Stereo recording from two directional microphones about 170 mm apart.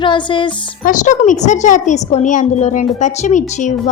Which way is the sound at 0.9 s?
45° left (ahead or behind).